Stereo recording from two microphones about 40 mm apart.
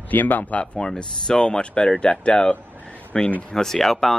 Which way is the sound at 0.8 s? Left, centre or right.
Centre.